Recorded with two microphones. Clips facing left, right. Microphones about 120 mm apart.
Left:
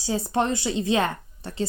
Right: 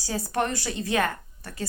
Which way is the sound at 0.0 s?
20° left (ahead or behind).